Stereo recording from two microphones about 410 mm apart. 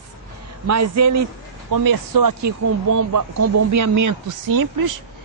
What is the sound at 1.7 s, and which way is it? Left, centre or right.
A man's voice, right.